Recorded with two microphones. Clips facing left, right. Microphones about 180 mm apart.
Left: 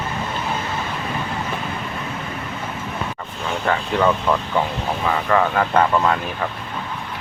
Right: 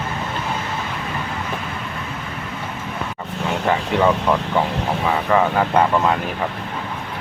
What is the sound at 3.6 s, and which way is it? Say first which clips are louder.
Speech: right 1 dB; 15° right (ahead or behind).